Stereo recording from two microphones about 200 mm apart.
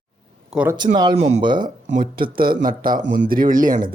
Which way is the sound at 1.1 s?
30° right (ahead or behind).